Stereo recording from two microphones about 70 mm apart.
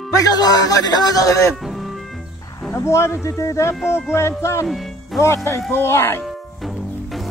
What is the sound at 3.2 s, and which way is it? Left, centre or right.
Speech, left.